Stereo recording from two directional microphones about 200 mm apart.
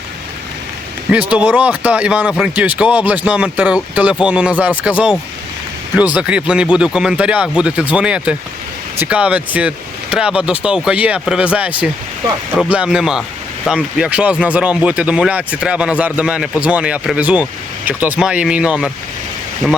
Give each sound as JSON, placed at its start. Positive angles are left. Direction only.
{"t": 1.3, "sound": "speech", "side_deg": -5}
{"t": 6.1, "sound": "speech", "side_deg": -5}